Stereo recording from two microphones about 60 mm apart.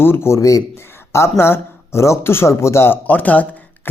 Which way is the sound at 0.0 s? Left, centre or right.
Left.